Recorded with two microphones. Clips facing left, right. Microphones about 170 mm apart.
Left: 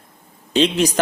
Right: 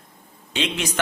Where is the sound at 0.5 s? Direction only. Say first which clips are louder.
Left 9 dB; 35° left (ahead or behind).